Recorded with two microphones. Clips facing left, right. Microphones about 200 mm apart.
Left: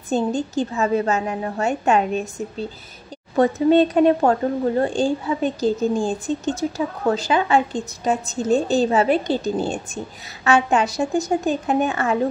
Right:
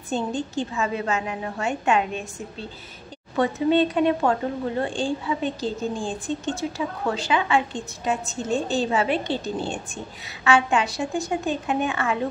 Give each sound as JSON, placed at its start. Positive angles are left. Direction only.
{"t": 0.1, "sound": "speech", "side_deg": 40}
{"t": 3.3, "sound": "speech", "side_deg": 40}